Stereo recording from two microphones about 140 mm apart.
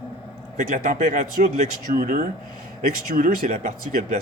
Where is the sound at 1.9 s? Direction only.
90° right.